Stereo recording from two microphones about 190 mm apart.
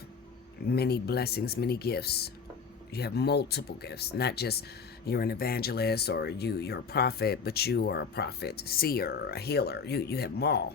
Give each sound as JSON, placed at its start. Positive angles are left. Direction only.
{"t": 0.7, "sound": "speech", "side_deg": 55}